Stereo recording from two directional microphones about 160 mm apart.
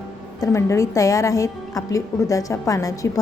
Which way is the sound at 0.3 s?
20° left (ahead or behind).